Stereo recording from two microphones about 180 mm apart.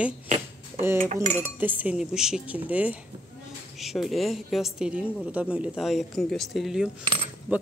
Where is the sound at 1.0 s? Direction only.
40° right (ahead or behind).